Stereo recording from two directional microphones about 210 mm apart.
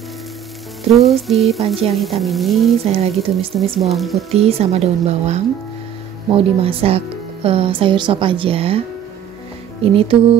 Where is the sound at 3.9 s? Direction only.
Centre (ahead or behind).